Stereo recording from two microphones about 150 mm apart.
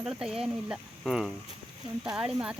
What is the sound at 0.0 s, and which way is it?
Speech, 5° right (ahead or behind).